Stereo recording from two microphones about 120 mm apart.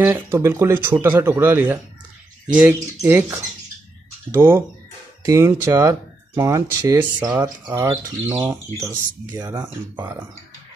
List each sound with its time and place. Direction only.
0.0 s speech: 20° right (ahead or behind)